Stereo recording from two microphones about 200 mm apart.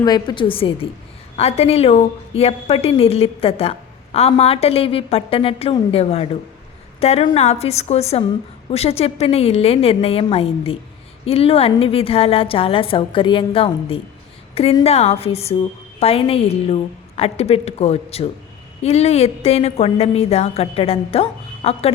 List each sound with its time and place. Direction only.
0.0 s a woman's voice: 20° left (ahead or behind)